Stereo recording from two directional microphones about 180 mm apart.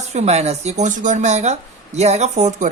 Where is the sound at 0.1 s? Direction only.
40° right (ahead or behind).